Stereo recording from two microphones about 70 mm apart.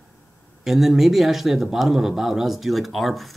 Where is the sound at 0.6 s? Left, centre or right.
Centre.